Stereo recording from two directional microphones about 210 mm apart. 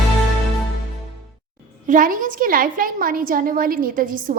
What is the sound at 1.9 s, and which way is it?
A woman's voice, 40° right (ahead or behind).